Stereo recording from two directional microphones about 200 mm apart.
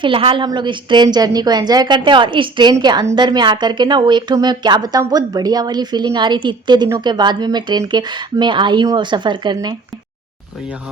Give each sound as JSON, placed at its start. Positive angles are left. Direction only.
{"t": 0.0, "sound": "a woman's voice", "side_deg": -25}